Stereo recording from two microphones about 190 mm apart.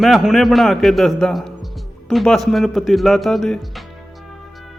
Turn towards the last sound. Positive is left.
turn(degrees=0)  # may be behind; listen again after turning